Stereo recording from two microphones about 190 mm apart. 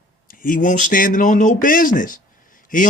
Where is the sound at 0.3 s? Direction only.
45° left (ahead or behind).